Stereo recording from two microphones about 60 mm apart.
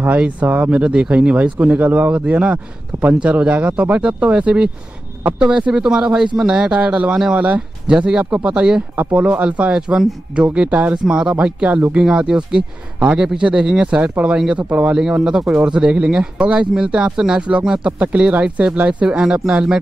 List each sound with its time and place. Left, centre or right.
0.0 s a man's voice: right
7.8 s a man's voice: centre
15.0 s a man's voice: centre